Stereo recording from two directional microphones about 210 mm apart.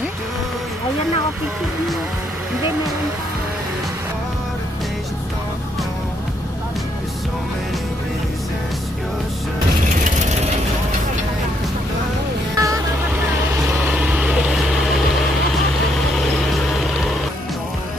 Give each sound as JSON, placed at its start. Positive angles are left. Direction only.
{"t": 12.5, "sound": "music", "side_deg": -15}
{"t": 13.9, "sound": "vehicle", "side_deg": -5}